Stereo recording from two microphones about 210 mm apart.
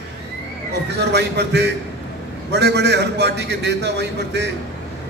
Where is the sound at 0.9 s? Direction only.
55° right (ahead or behind).